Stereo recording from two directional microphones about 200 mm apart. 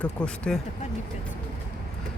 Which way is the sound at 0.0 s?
5° left (ahead or behind).